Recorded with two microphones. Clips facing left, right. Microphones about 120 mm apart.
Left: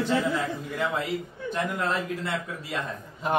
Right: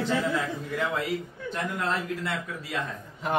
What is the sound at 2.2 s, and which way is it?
A man's voice, 20° left (ahead or behind).